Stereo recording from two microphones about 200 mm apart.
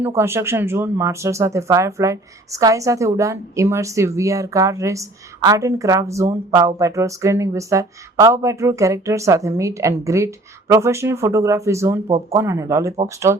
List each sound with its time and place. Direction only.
0.0 s speech: 10° right (ahead or behind)